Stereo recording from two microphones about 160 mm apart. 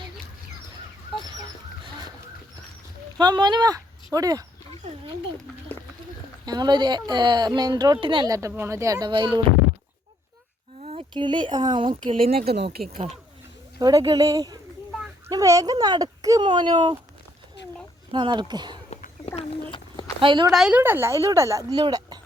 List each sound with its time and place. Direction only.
3.2 s speech: 25° right (ahead or behind)
6.4 s a woman's voice: 25° right (ahead or behind)
10.8 s a sound: 45° right (ahead or behind)
11.1 s a woman's voice: 30° right (ahead or behind)
12.3 s speech: 75° right (ahead or behind)
13.7 s a woman's voice: 25° right (ahead or behind)
18.1 s a woman's voice: 30° right (ahead or behind)
18.9 s a sound: 45° left (ahead or behind)
20.1 s speech: 30° right (ahead or behind)
20.5 s a woman's voice: 5° right (ahead or behind); by 22.2 s 25° right (ahead or behind)